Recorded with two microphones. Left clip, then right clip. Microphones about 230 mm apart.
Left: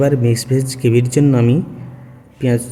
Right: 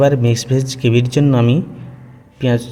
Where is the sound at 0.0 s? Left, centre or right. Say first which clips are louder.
Right 2 dB; centre.